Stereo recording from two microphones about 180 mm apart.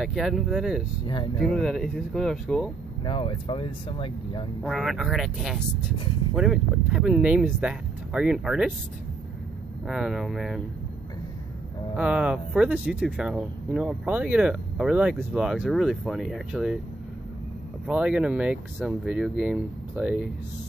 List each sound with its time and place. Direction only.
0.0 s speech: centre (ahead or behind)
1.0 s speech: 25° left (ahead or behind)
1.4 s speech: 5° left (ahead or behind)
3.0 s speech: 30° left (ahead or behind)
4.6 s speech: centre (ahead or behind)
9.8 s speech: centre (ahead or behind)
12.0 s speech: 5° right (ahead or behind)
17.8 s speech: 5° right (ahead or behind)